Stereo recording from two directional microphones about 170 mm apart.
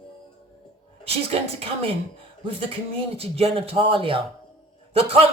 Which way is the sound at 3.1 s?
35° right (ahead or behind).